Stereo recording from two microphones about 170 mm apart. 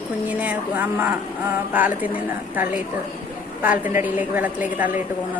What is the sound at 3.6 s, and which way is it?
Speech, 10° right (ahead or behind).